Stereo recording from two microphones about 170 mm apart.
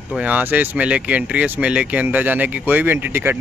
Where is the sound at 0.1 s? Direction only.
10° right (ahead or behind).